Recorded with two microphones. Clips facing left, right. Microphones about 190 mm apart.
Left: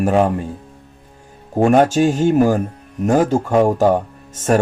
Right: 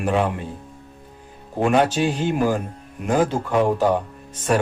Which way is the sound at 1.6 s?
45° left (ahead or behind).